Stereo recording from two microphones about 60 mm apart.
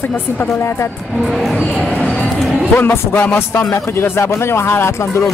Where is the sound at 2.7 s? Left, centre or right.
Left.